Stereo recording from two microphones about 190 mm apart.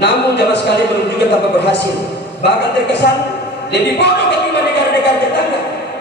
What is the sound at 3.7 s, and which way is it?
A man's voice, 60° left (ahead or behind).